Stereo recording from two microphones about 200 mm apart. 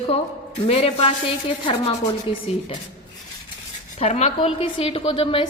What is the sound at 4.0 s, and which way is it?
A woman's voice, 35° left (ahead or behind).